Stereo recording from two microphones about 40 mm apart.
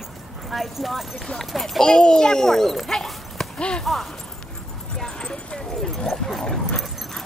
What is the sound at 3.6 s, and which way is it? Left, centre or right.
Speech, left.